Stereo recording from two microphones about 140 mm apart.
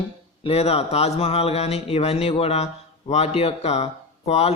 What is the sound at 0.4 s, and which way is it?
Speech, 45° left (ahead or behind).